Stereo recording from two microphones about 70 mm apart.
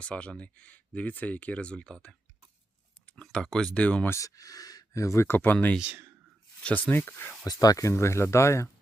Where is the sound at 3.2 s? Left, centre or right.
Centre.